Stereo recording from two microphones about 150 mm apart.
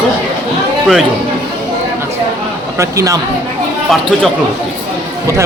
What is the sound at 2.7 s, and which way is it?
Speech, 20° right (ahead or behind).